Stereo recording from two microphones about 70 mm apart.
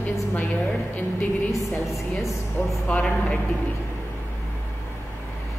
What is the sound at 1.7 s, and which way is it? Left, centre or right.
Speech, centre.